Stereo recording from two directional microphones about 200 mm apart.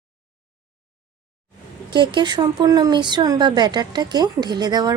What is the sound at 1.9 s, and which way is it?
Speech, 25° right (ahead or behind).